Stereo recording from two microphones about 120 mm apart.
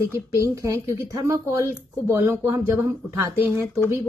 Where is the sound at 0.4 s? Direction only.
25° right (ahead or behind).